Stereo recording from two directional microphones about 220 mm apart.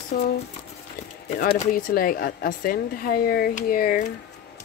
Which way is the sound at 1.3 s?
40° left (ahead or behind).